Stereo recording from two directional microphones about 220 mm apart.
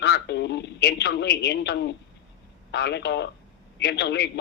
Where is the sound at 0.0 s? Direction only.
50° left (ahead or behind).